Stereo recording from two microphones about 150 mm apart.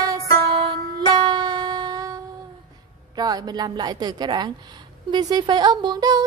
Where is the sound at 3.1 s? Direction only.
25° right (ahead or behind).